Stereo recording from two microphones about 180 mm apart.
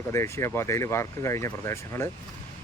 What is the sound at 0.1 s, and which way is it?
Speech, 15° left (ahead or behind).